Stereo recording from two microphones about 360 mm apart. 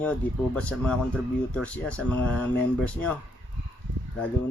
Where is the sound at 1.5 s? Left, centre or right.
Centre.